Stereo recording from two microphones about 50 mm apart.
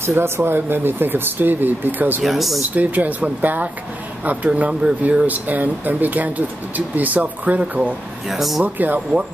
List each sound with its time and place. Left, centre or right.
0.0 s speech: right
0.4 s speech: right
2.2 s speech: centre
2.7 s speech: right
8.3 s speech: centre
8.6 s speech: right